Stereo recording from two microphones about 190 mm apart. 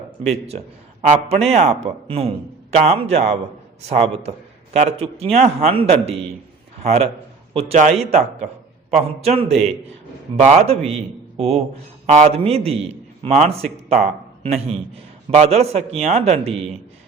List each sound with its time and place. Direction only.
0.3 s a man's voice: 35° right (ahead or behind)